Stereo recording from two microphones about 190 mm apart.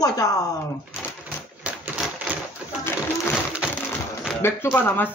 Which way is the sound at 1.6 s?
5° right (ahead or behind).